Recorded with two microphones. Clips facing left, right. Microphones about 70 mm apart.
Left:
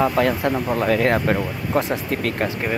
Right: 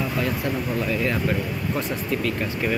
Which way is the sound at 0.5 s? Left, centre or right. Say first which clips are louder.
Left 4 dB; left.